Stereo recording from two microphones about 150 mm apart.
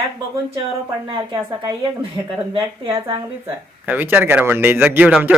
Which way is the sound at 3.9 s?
10° right (ahead or behind).